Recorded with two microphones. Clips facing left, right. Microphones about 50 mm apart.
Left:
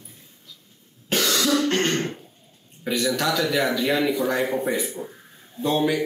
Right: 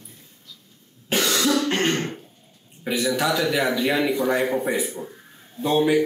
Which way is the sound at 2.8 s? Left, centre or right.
Centre.